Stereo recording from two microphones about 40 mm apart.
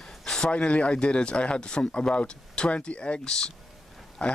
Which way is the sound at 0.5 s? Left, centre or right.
Left.